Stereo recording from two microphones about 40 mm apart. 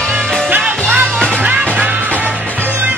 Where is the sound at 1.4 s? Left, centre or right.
Right.